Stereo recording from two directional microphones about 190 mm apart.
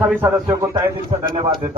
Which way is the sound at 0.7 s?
25° right (ahead or behind).